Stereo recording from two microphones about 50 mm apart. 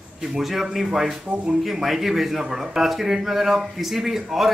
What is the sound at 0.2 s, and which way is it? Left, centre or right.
Speech, centre.